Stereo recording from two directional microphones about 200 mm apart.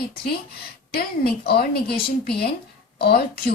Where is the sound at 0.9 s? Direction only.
50° left (ahead or behind).